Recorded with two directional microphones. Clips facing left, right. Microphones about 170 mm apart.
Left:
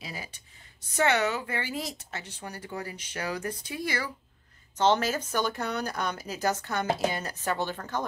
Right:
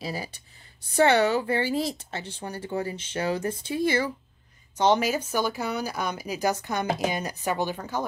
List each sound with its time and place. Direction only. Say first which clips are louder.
0.0 s speech: right 8 dB; 35° right (ahead or behind)
4.7 s speech: right 2 dB; 15° right (ahead or behind)